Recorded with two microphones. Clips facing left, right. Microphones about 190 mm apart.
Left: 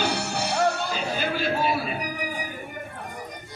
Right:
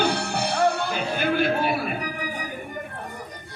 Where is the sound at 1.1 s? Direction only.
55° right (ahead or behind).